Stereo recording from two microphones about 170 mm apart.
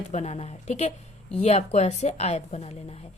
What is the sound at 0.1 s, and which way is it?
A woman's voice, 40° left (ahead or behind).